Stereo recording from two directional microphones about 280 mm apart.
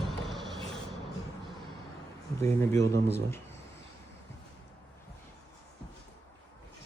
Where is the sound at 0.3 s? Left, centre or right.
Centre.